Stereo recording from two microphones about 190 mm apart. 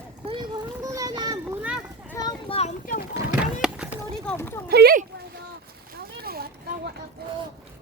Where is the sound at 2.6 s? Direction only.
40° left (ahead or behind).